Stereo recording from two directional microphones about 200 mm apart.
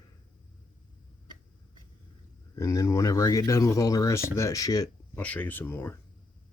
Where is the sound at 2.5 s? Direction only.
15° left (ahead or behind).